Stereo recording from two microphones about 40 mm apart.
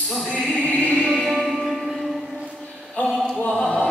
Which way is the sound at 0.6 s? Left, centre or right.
Left.